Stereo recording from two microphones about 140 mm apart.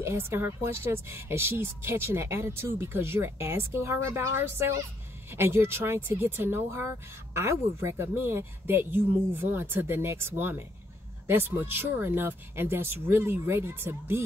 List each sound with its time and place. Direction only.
0.0 s speech: 20° right (ahead or behind)